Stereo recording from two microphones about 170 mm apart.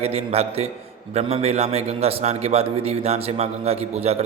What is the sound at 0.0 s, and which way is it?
A man's voice, 35° right (ahead or behind).